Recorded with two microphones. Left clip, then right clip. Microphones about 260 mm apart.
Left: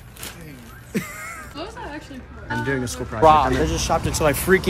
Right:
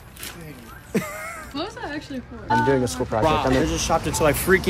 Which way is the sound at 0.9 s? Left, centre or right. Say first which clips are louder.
Right 2 dB; centre.